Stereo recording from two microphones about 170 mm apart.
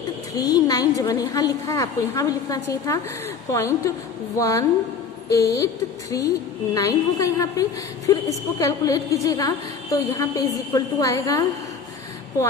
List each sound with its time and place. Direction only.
0.3 s a woman's voice: 20° left (ahead or behind)